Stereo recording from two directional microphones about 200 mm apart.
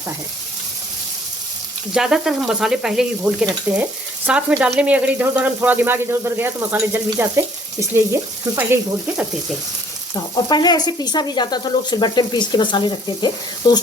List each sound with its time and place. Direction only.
1.9 s speech: centre (ahead or behind)
10.5 s speech: 20° left (ahead or behind)